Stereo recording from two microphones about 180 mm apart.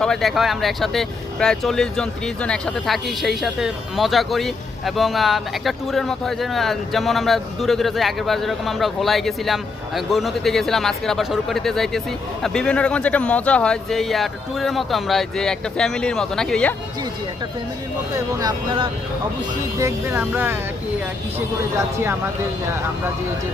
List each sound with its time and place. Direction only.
0.0 s speech: centre (ahead or behind)
18.3 s speech: 20° right (ahead or behind)
19.8 s speech: 10° right (ahead or behind)